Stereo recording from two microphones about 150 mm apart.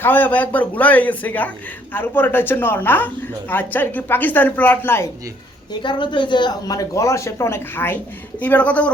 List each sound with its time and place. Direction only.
0.0 s a man's voice: 10° left (ahead or behind)
5.8 s a man's voice: 30° left (ahead or behind); by 8.9 s 10° left (ahead or behind)